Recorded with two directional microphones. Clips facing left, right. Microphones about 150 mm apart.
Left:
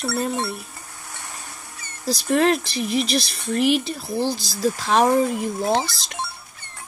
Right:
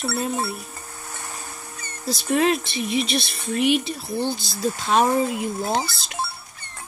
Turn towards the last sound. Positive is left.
turn(degrees=-5)  # may be behind; listen again after turning